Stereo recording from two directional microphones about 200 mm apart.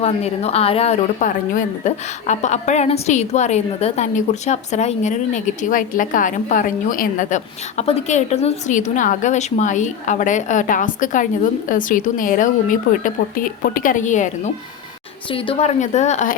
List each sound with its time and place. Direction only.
0.0 s a woman's voice: 30° left (ahead or behind)
15.3 s a woman's voice: 25° left (ahead or behind)